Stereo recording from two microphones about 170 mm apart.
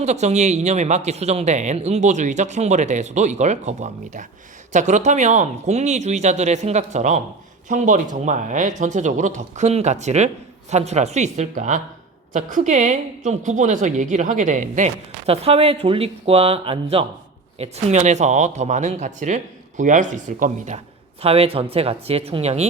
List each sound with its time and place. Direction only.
0.0 s speech: 40° right (ahead or behind)